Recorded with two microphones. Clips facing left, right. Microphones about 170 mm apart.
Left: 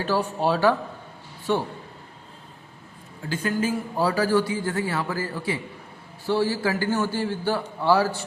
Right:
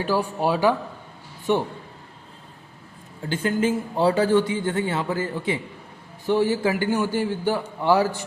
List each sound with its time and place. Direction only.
0.0 s a man's voice: 10° right (ahead or behind)
3.2 s a man's voice: 25° right (ahead or behind)